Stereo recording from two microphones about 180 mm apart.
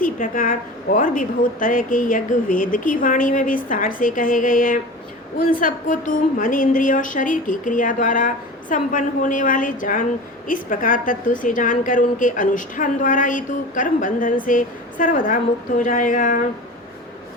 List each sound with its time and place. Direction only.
0.0 s a woman's voice: 50° left (ahead or behind)